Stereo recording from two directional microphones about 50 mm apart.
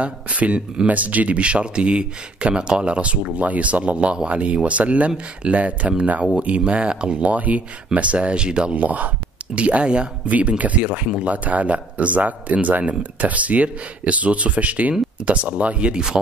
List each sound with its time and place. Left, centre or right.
0.0 s speech: right
8.8 s speech: right